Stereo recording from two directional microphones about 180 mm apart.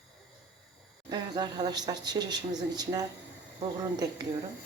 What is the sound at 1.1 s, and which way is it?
Speech, 25° right (ahead or behind).